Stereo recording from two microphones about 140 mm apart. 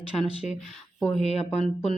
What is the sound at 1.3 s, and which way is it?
Speech, 50° left (ahead or behind).